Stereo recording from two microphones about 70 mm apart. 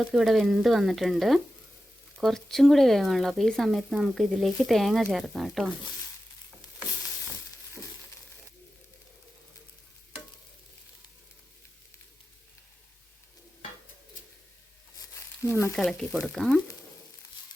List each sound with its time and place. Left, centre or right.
0.1 s speech: centre
15.4 s speech: left
15.7 s speech: centre